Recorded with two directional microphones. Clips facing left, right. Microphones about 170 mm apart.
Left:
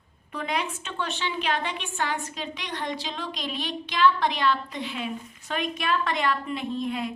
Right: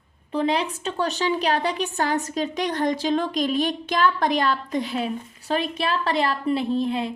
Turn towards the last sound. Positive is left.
turn(degrees=-30)  # may be behind; listen again after turning